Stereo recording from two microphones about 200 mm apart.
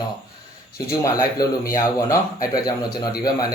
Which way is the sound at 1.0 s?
15° left (ahead or behind).